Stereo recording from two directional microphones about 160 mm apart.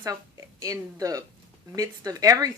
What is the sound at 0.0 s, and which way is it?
Speech, 20° right (ahead or behind).